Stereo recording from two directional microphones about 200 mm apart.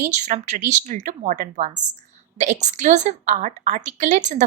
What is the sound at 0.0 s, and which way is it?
A woman's voice, 35° right (ahead or behind).